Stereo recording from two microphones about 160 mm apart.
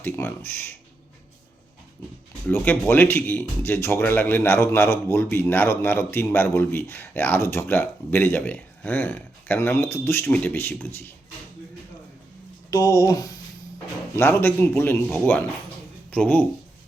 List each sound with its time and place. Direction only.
0.0 s speech: 10° left (ahead or behind)
2.5 s speech: 10° left (ahead or behind)
12.7 s speech: 20° left (ahead or behind)